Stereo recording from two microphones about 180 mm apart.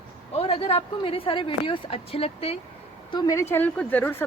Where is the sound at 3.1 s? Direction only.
20° left (ahead or behind).